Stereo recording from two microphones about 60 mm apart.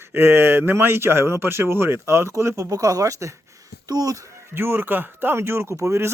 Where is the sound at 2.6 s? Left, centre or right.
Right.